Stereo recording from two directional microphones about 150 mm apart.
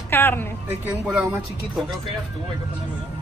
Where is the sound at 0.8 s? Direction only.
5° right (ahead or behind).